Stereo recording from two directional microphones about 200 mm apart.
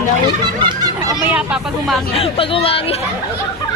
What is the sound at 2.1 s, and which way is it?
Speech, 30° left (ahead or behind).